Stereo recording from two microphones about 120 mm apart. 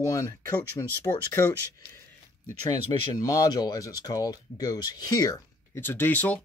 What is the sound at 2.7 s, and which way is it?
Speech, 30° left (ahead or behind).